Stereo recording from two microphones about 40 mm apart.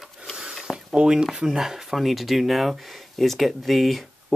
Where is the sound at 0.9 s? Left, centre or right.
Right; by 4.0 s centre.